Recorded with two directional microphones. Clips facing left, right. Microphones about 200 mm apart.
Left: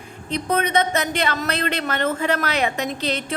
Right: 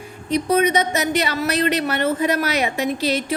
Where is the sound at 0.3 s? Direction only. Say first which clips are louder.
Right 5 dB; 10° right (ahead or behind).